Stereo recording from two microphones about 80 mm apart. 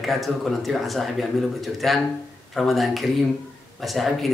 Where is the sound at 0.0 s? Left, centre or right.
Centre.